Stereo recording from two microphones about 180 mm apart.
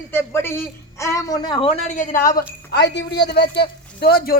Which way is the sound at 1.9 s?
45° left (ahead or behind).